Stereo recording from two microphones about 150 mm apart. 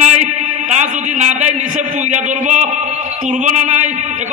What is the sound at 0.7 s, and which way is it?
A man's voice, 50° right (ahead or behind).